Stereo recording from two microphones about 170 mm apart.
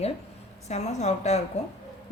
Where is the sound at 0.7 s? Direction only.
40° left (ahead or behind).